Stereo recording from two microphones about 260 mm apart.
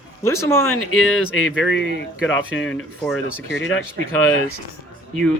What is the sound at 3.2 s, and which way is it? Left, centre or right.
Speech, left.